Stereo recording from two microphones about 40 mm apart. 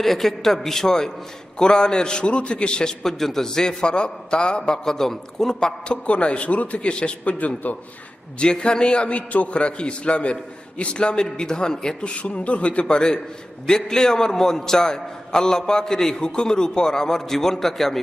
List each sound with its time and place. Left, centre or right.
0.0 s a man's voice: centre; by 2.9 s left
3.0 s a man's voice: centre
4.9 s a man's voice: centre
5.9 s a man's voice: left
7.3 s a man's voice: left
8.4 s a man's voice: left
12.1 s a man's voice: left
12.8 s a man's voice: centre